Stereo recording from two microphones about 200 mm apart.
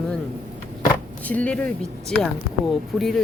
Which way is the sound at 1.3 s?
5° left (ahead or behind).